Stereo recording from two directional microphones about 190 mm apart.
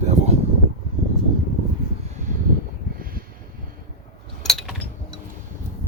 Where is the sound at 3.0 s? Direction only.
50° right (ahead or behind).